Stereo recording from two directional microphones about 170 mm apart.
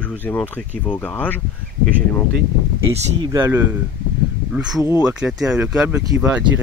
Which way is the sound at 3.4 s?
10° right (ahead or behind).